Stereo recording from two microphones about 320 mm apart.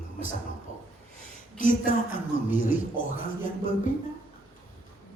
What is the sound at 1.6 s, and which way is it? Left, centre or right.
Speech, left.